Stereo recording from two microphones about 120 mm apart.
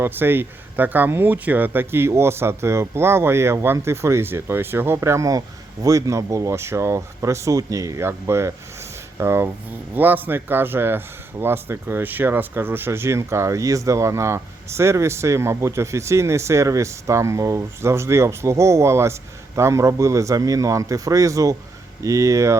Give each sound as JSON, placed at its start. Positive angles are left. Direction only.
{"t": 0.0, "sound": "speech", "side_deg": -20}